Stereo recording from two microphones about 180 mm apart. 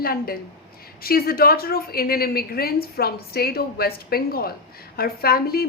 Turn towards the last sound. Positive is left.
turn(degrees=55)  # may be behind; listen again after turning